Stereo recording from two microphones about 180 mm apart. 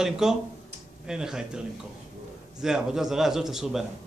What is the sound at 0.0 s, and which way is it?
A man's voice, 5° right (ahead or behind).